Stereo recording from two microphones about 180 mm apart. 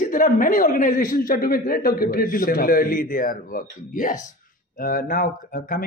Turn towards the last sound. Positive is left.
turn(degrees=50)  # may be behind; listen again after turning